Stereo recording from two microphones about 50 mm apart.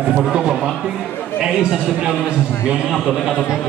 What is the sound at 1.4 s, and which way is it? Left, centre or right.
Speech, centre.